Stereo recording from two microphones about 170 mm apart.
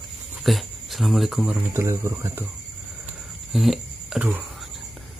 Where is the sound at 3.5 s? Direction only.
Centre (ahead or behind).